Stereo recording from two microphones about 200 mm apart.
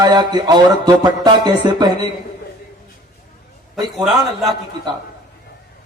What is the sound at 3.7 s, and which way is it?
Speech, centre (ahead or behind).